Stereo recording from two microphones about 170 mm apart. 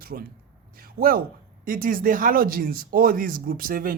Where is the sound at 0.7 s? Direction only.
60° right (ahead or behind).